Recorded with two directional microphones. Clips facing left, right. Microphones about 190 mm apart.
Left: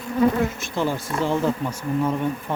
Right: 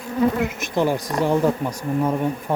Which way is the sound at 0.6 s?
15° right (ahead or behind).